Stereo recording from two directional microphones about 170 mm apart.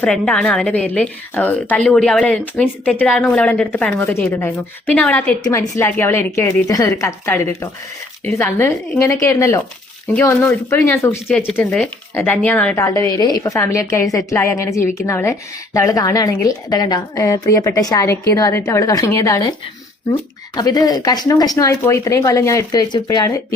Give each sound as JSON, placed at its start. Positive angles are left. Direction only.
{"t": 0.0, "sound": "a woman's voice", "side_deg": 5}
{"t": 5.5, "sound": "a woman's voice", "side_deg": 15}
{"t": 20.6, "sound": "a woman's voice", "side_deg": 25}